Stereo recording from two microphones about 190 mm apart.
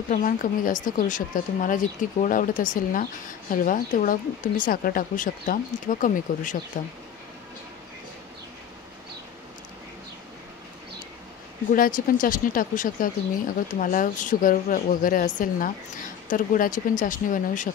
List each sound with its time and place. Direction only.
0.1 s speech: 45° left (ahead or behind)
11.7 s speech: 45° left (ahead or behind)